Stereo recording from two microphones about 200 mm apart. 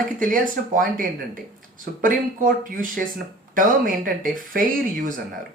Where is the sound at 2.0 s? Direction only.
40° right (ahead or behind).